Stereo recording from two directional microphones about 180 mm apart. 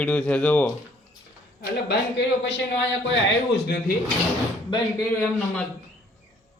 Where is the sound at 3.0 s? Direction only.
65° left (ahead or behind).